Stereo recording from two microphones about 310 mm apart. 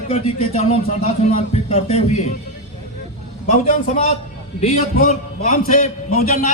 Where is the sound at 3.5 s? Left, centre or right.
Left.